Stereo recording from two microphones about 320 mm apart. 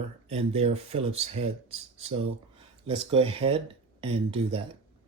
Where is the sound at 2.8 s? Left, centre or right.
Centre.